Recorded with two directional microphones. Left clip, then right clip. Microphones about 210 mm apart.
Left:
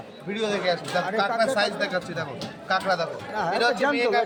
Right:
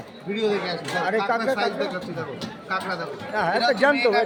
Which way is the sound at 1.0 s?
Centre (ahead or behind).